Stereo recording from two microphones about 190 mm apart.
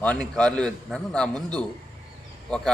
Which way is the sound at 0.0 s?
5° left (ahead or behind).